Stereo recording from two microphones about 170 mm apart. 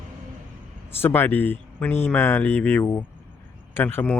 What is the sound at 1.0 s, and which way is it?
Speech, 10° left (ahead or behind).